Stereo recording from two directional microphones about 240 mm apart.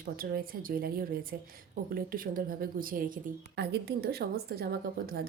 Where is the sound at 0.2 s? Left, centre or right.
Right.